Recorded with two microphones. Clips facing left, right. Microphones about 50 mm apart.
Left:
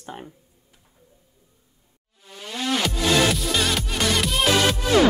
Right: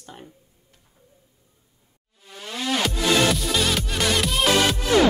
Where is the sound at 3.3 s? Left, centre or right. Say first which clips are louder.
Even; centre.